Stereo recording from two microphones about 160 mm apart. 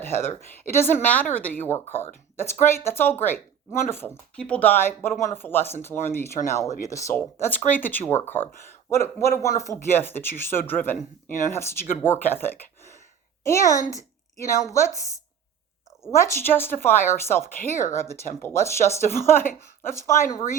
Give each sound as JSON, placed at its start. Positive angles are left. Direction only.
{"t": 0.1, "sound": "a woman's voice", "side_deg": 15}